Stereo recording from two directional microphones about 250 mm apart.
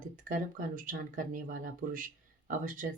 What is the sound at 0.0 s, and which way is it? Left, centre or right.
Speech, right.